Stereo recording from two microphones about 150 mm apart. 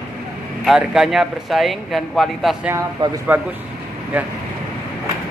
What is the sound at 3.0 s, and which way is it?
Speech, 30° right (ahead or behind).